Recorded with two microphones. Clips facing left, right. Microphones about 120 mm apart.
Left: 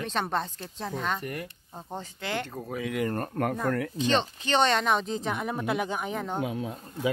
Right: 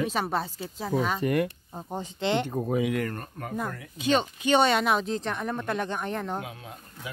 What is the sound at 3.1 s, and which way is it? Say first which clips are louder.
Speech: left 9 dB; 60° left (ahead or behind).